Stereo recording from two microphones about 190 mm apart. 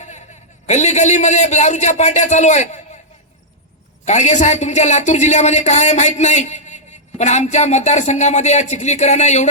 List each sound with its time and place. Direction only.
0.0 s a sound: 40° left (ahead or behind)
0.7 s a man's voice: 35° left (ahead or behind)
4.0 s a man's voice: 40° left (ahead or behind)